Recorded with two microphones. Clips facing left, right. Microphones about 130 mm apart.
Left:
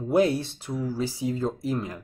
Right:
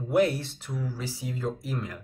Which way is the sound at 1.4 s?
25° left (ahead or behind).